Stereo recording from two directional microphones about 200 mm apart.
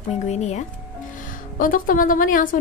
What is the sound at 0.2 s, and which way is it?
A woman's voice, 35° left (ahead or behind).